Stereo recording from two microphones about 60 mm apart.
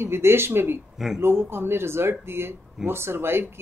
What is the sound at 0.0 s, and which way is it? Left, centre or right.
Speech, right.